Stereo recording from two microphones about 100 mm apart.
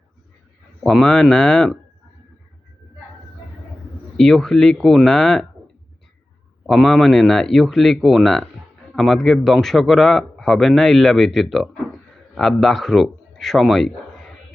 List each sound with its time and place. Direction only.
0.9 s speech: 5° left (ahead or behind)
4.2 s speech: 5° left (ahead or behind)
6.7 s speech: centre (ahead or behind)